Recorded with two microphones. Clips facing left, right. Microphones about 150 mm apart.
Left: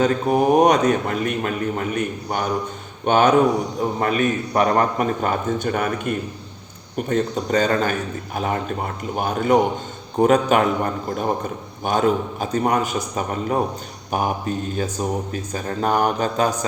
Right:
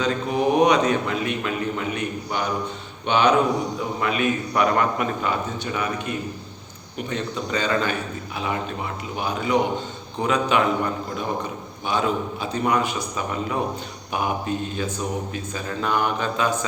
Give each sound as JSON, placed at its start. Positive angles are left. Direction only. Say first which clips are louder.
{"t": 0.0, "sound": "a man's voice", "louder": "left 4 dB", "side_deg": 50}